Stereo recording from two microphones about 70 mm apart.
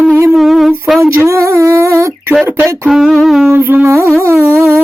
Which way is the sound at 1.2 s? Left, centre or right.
Right.